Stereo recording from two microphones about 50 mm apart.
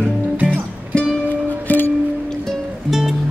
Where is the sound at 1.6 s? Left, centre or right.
Left.